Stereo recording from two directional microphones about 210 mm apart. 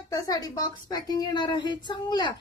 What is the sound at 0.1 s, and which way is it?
A woman's voice, 15° left (ahead or behind).